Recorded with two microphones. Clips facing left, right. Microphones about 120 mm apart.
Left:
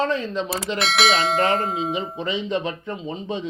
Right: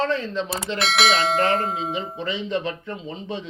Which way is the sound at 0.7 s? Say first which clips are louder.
Even; centre (ahead or behind).